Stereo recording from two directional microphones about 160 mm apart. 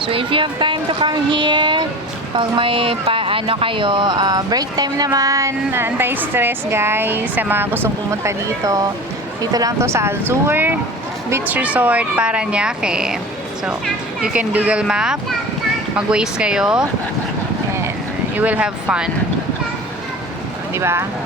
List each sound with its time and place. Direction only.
0.0 s speech: 35° right (ahead or behind); by 16.9 s 5° right (ahead or behind)
18.3 s speech: 10° right (ahead or behind)
20.7 s speech: 15° right (ahead or behind)